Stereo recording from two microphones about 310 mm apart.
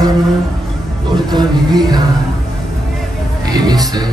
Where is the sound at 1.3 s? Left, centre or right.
Centre.